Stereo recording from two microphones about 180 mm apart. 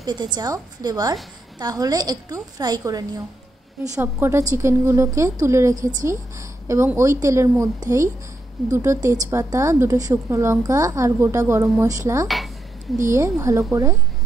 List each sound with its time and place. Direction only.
0.0 s a woman's voice: 25° right (ahead or behind)